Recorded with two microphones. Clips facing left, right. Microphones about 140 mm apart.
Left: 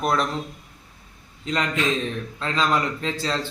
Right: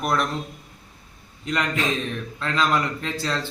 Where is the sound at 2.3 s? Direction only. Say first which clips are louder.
Even; 25° left (ahead or behind).